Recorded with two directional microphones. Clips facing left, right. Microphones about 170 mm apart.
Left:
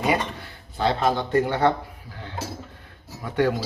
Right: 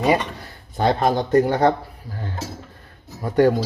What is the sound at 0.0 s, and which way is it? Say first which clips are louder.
Speech: right 4 dB; 40° right (ahead or behind).